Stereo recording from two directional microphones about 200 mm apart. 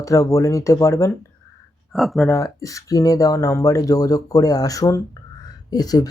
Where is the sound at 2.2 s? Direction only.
15° left (ahead or behind).